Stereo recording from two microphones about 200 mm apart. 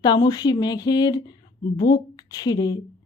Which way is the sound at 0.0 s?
20° left (ahead or behind).